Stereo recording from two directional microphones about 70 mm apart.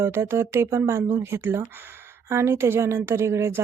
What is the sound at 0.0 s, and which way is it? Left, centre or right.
Speech, right.